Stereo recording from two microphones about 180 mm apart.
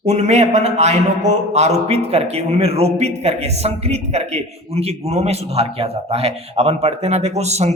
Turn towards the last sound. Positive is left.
turn(degrees=-40)  # may be behind; listen again after turning